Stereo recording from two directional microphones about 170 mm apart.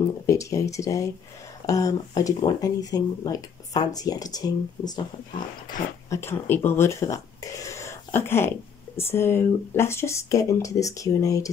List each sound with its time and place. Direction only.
0.0 s speech: 20° left (ahead or behind)